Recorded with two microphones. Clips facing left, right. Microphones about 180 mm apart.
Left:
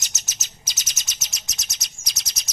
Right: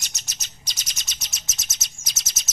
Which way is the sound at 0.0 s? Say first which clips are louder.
Even; centre (ahead or behind).